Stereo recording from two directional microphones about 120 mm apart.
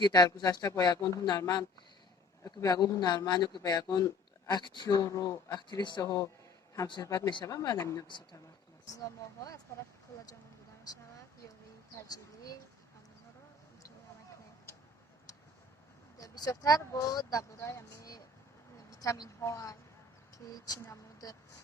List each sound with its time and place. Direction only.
0.0 s speech: 35° left (ahead or behind)
6.0 s speech: 30° left (ahead or behind)
8.0 s speech: 40° left (ahead or behind)
12.1 s speech: 30° left (ahead or behind)
16.1 s a woman's voice: 30° left (ahead or behind)